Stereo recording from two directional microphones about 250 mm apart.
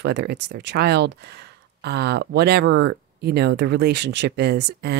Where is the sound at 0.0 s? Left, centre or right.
Right.